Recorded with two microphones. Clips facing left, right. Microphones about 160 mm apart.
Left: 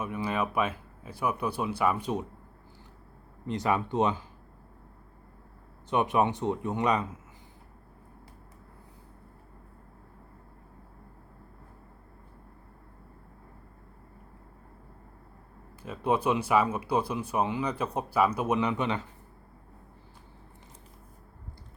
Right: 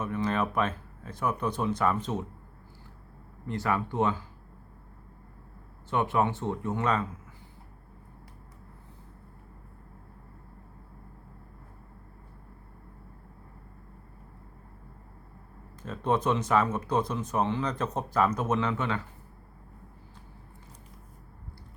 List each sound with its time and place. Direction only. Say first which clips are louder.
0.0 s speech: right 2 dB; 10° left (ahead or behind)
3.4 s speech: left 1 dB; 20° left (ahead or behind)
5.9 s speech: left 1 dB; 20° left (ahead or behind)
15.8 s speech: even; 10° left (ahead or behind)